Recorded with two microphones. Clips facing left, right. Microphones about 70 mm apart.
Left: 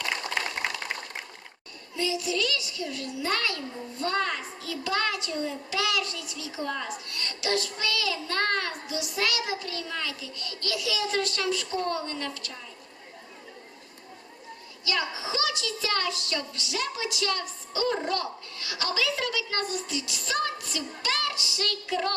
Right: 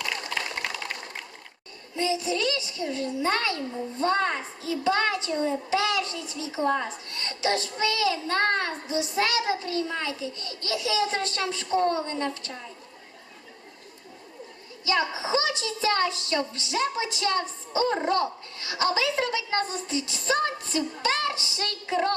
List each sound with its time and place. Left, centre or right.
0.6 s a sound: left
2.0 s a woman's voice: right
14.8 s a woman's voice: right